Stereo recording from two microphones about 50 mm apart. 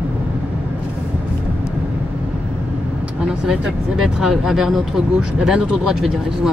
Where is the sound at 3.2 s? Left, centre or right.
Centre.